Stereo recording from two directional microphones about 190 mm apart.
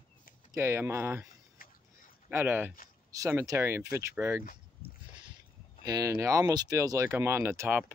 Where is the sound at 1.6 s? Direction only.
50° left (ahead or behind).